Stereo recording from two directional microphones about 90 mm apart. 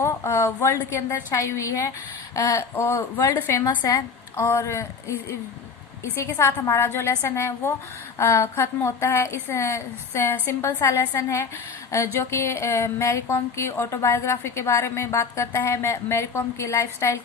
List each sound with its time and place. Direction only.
0.0 s speech: 30° left (ahead or behind)
6.4 s a woman's voice: 30° left (ahead or behind)